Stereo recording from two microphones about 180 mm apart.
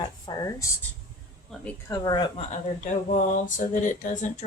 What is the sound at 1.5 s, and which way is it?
Speech, centre (ahead or behind).